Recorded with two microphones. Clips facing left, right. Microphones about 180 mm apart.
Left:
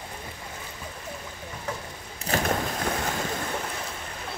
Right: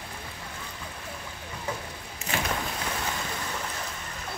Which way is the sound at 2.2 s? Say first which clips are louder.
Left 5 dB; 40° left (ahead or behind).